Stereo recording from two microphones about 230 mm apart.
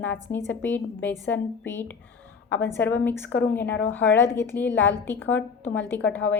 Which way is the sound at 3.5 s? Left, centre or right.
Centre.